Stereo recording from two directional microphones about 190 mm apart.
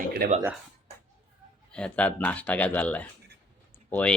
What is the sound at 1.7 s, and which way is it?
Speech, 5° left (ahead or behind).